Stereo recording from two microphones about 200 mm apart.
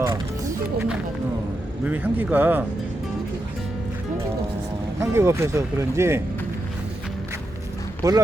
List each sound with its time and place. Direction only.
0.0 s music: 20° right (ahead or behind)
1.8 s speech: 10° right (ahead or behind)
4.9 s speech: 15° right (ahead or behind)
8.0 s speech: 15° right (ahead or behind)